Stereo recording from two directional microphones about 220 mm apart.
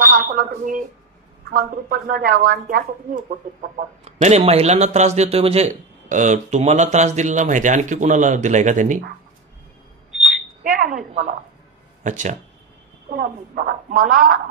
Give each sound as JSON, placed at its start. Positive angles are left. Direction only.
{"t": 0.0, "sound": "a man's voice", "side_deg": -40}
{"t": 10.6, "sound": "smoke detector", "side_deg": -40}
{"t": 12.0, "sound": "a man's voice", "side_deg": -35}